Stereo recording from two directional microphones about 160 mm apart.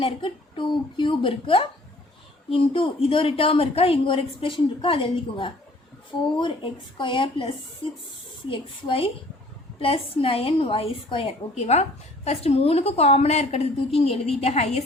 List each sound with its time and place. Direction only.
0.0 s a woman's voice: 30° left (ahead or behind)